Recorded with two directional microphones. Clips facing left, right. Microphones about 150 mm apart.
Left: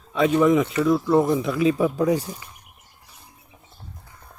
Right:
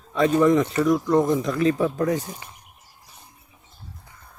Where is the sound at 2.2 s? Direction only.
20° right (ahead or behind).